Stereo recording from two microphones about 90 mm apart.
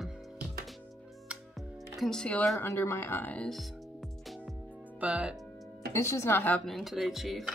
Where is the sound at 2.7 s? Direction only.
30° left (ahead or behind).